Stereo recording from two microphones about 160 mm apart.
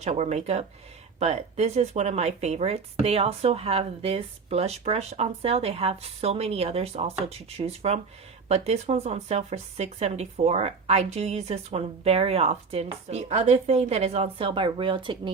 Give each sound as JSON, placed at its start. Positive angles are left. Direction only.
{"t": 0.0, "sound": "speech", "side_deg": -45}